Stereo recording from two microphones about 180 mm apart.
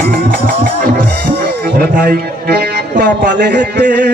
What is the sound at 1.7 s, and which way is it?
Speech, 60° right (ahead or behind).